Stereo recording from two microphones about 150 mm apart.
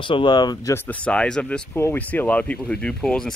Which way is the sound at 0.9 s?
10° left (ahead or behind).